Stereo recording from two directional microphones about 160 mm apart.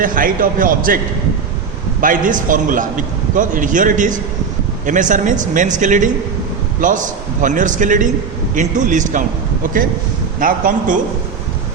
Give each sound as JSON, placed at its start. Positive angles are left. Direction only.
{"t": 0.0, "sound": "a man's voice", "side_deg": -60}
{"t": 2.0, "sound": "a man's voice", "side_deg": -55}
{"t": 10.4, "sound": "a man's voice", "side_deg": -60}